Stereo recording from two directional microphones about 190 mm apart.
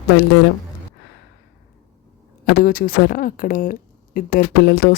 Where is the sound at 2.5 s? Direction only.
50° left (ahead or behind).